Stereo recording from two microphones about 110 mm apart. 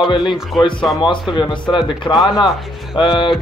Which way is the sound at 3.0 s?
45° left (ahead or behind).